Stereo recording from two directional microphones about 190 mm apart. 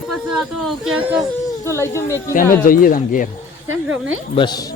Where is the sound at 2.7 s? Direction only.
45° left (ahead or behind).